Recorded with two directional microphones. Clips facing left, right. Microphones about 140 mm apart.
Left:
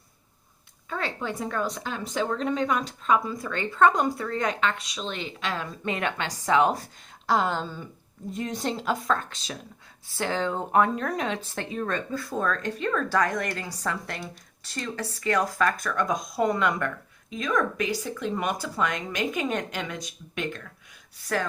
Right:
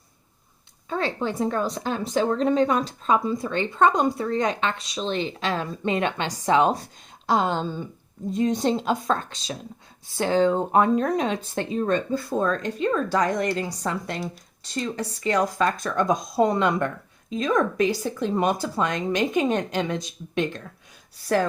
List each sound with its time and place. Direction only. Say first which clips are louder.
0.9 s speech: right 5 dB; 30° right (ahead or behind)